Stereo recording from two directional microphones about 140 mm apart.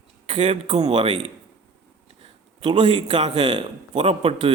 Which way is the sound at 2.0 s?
45° right (ahead or behind).